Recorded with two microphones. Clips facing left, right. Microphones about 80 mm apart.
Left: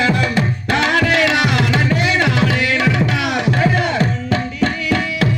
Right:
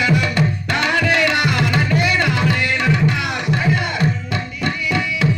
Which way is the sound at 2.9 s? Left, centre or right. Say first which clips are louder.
Left 2 dB; left.